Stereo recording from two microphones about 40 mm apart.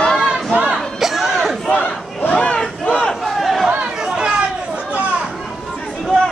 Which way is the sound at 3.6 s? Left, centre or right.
Right.